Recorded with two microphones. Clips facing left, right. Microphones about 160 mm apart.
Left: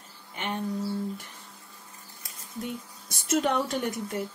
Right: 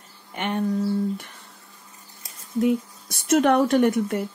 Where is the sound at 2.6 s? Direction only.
65° right (ahead or behind).